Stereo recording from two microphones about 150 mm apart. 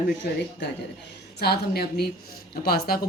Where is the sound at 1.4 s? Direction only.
90° left.